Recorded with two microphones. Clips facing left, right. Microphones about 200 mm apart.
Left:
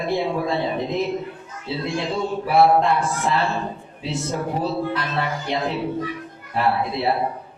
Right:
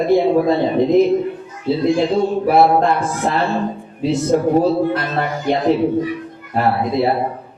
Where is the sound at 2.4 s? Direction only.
45° right (ahead or behind).